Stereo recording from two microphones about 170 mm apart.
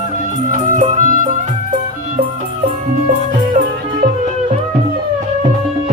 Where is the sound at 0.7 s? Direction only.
50° right (ahead or behind).